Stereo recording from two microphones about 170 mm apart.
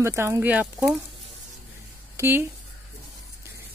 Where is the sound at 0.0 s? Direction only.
15° right (ahead or behind).